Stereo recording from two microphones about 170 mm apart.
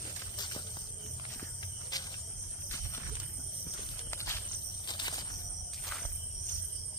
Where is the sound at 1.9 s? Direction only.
20° left (ahead or behind).